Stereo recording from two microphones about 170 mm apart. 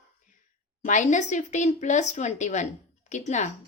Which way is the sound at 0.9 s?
45° left (ahead or behind).